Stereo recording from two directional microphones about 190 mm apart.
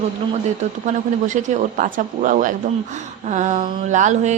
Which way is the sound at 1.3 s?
40° right (ahead or behind).